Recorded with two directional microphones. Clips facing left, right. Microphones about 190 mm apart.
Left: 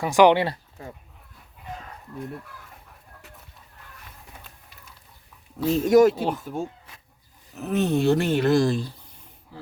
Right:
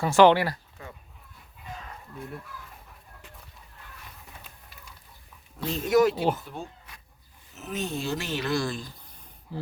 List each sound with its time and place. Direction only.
0.0 s speech: 15° left (ahead or behind); by 0.9 s 30° left (ahead or behind)
5.5 s speech: 5° left (ahead or behind)
5.8 s speech: 45° left (ahead or behind)
6.1 s speech: centre (ahead or behind)
6.4 s speech: 45° left (ahead or behind)
7.5 s speech: 60° left (ahead or behind); by 8.9 s 40° left (ahead or behind)